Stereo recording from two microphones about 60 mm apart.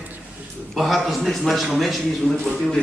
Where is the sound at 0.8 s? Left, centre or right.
Centre.